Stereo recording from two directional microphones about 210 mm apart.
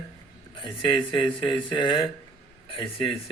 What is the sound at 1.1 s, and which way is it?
Speech, 25° left (ahead or behind).